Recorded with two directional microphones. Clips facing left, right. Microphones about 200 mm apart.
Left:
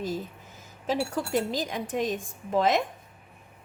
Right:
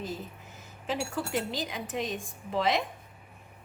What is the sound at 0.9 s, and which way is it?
Speech, 40° left (ahead or behind).